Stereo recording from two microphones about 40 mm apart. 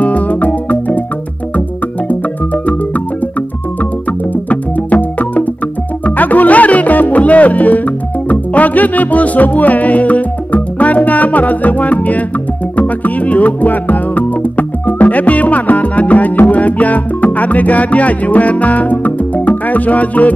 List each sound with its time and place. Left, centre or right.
0.0 s music: left
4.5 s music: left